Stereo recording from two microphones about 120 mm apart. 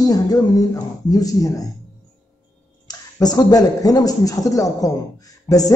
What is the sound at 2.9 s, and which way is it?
Speech, 35° left (ahead or behind).